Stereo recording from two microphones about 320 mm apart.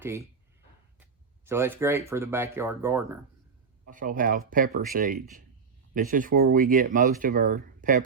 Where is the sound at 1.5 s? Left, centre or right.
Centre.